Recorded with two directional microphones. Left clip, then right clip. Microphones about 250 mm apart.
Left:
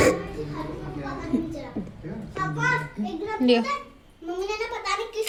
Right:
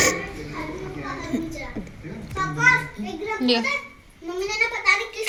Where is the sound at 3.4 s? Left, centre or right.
Left.